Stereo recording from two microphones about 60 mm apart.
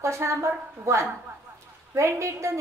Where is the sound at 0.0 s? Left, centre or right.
Right.